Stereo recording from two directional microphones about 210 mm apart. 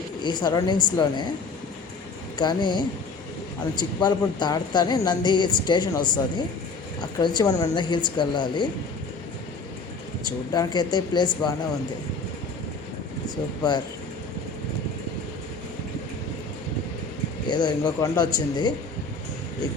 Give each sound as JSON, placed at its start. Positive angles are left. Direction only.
{"t": 0.2, "sound": "speech", "side_deg": 20}
{"t": 2.4, "sound": "speech", "side_deg": 20}
{"t": 10.5, "sound": "speech", "side_deg": 20}
{"t": 13.6, "sound": "speech", "side_deg": 20}
{"t": 17.5, "sound": "speech", "side_deg": 20}